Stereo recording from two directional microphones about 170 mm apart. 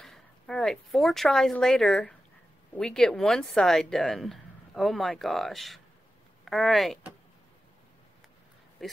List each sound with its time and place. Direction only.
0.0 s speech: 5° left (ahead or behind)